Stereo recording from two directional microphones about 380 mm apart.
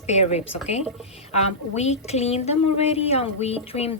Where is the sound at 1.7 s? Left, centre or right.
Centre.